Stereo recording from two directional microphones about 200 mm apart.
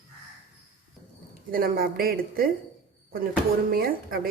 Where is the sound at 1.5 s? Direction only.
45° right (ahead or behind).